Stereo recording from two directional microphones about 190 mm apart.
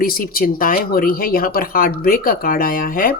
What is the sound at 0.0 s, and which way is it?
Speech, 50° left (ahead or behind).